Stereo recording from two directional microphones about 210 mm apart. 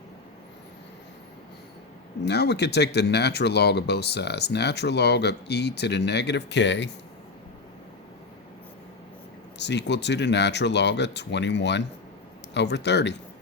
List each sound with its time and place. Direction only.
2.2 s speech: 50° left (ahead or behind)
9.6 s speech: 55° left (ahead or behind)